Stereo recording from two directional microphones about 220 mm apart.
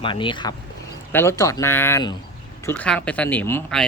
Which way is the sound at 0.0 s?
20° left (ahead or behind).